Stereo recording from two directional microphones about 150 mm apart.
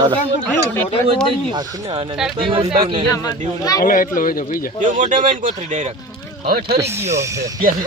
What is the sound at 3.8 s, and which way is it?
Speech, 70° left (ahead or behind).